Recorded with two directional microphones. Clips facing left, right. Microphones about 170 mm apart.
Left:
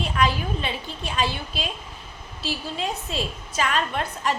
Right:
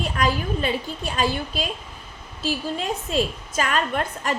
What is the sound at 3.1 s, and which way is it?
A woman's voice, 45° right (ahead or behind).